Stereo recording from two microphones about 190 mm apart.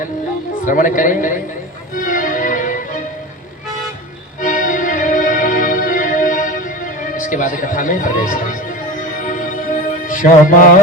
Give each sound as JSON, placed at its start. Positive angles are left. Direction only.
{"t": 0.6, "sound": "a woman's voice", "side_deg": 45}
{"t": 2.0, "sound": "music", "side_deg": 45}
{"t": 4.4, "sound": "music", "side_deg": 45}